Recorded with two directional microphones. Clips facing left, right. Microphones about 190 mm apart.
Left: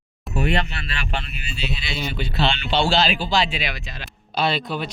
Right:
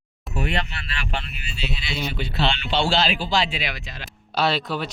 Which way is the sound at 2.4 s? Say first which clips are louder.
Left 2 dB; 40° left (ahead or behind).